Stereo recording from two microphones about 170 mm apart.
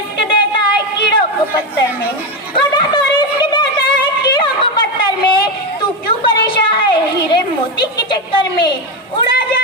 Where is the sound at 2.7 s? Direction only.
25° left (ahead or behind).